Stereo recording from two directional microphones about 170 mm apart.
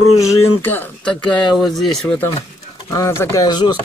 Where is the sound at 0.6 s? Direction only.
10° left (ahead or behind).